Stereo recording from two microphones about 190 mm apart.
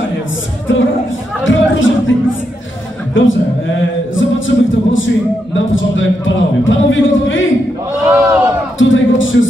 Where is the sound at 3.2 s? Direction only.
90° left.